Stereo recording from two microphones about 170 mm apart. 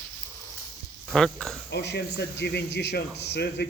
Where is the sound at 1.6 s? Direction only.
85° left.